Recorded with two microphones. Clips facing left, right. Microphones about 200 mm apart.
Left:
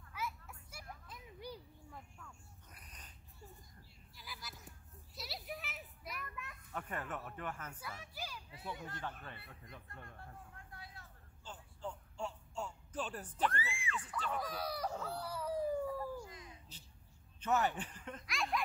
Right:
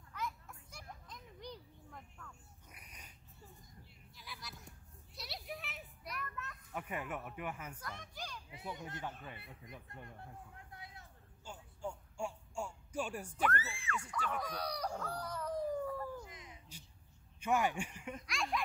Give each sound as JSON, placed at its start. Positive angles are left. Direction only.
{"t": 0.1, "sound": "children playing", "side_deg": 5}
{"t": 2.7, "sound": "cat", "side_deg": -10}
{"t": 4.1, "sound": "a sound", "side_deg": 0}
{"t": 6.7, "sound": "speech", "side_deg": -10}
{"t": 7.8, "sound": "speech", "side_deg": 5}
{"t": 8.5, "sound": "a sound", "side_deg": -20}
{"t": 13.7, "sound": "speech", "side_deg": 15}
{"t": 13.9, "sound": "speech", "side_deg": -10}
{"t": 14.3, "sound": "speech", "side_deg": 5}
{"t": 16.2, "sound": "a sound", "side_deg": -20}
{"t": 17.4, "sound": "speech", "side_deg": -10}
{"t": 18.2, "sound": "speech", "side_deg": 0}